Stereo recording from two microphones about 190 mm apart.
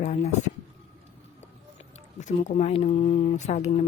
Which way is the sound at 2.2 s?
40° left (ahead or behind).